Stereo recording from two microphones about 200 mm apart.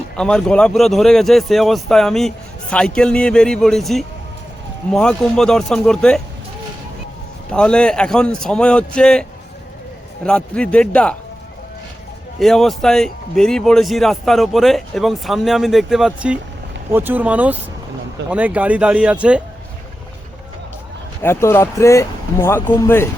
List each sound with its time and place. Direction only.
0.2 s a man's voice: 5° left (ahead or behind)
7.5 s a man's voice: 5° left (ahead or behind)
10.2 s a man's voice: 5° left (ahead or behind)
12.4 s a man's voice: centre (ahead or behind)
21.2 s speech: 10° left (ahead or behind)